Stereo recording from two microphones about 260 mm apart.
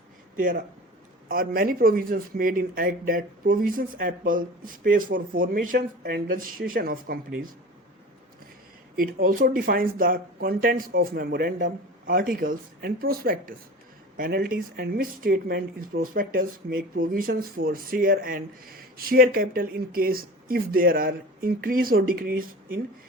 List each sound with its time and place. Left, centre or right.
0.3 s speech: right
9.0 s speech: right